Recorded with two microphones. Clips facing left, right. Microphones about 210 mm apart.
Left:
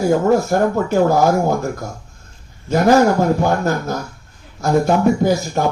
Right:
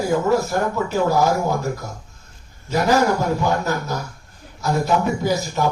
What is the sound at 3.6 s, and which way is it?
Music, 50° left (ahead or behind).